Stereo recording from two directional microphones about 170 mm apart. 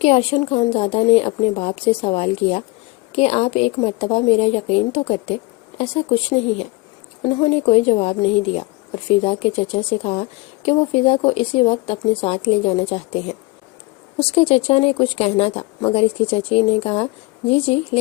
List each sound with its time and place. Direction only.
0.0 s speech: 35° left (ahead or behind)